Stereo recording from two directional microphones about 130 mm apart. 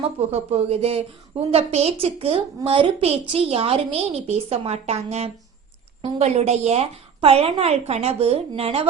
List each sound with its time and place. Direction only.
0.3 s a woman's voice: 50° right (ahead or behind)